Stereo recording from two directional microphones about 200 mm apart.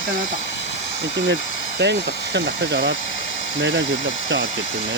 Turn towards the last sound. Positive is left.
turn(degrees=-70)  # may be behind; listen again after turning